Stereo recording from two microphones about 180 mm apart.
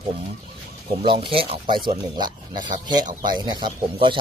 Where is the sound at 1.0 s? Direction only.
30° right (ahead or behind).